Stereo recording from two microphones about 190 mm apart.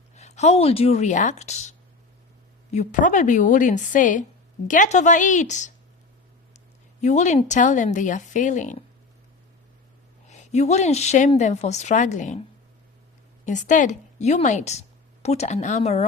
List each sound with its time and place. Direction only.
0.2 s speech: 35° left (ahead or behind)
2.7 s a woman's voice: 40° left (ahead or behind)
7.0 s a woman's voice: 40° left (ahead or behind)
10.2 s a woman's voice: 35° left (ahead or behind)